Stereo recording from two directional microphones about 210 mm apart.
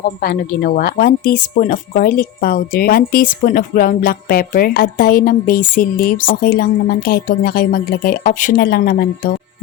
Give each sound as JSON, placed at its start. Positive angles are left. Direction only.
{"t": 0.2, "sound": "speech", "side_deg": 45}